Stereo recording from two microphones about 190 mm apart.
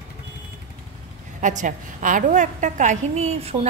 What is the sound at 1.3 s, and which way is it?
A woman's voice, 40° right (ahead or behind).